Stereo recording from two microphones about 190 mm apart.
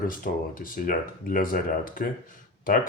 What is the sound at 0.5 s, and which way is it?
Speech, 45° left (ahead or behind).